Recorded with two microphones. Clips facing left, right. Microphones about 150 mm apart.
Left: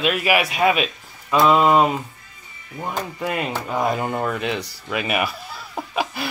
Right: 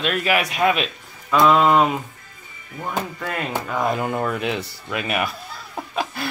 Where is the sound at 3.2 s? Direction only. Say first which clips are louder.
Left 2 dB; 20° left (ahead or behind).